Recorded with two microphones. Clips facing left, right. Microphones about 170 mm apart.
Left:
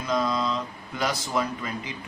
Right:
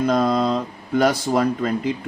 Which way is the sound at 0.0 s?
55° right (ahead or behind).